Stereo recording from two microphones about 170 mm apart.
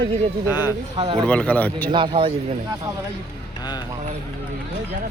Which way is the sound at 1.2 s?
10° left (ahead or behind).